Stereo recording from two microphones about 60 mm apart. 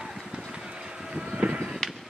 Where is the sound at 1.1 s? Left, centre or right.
Centre.